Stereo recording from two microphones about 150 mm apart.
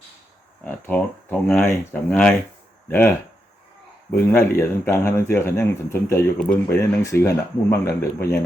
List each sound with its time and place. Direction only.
0.6 s speech: 10° left (ahead or behind)